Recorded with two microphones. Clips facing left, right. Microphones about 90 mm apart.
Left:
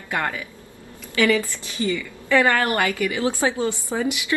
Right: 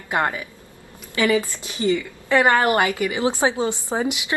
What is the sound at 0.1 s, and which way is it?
A woman's voice, 25° right (ahead or behind).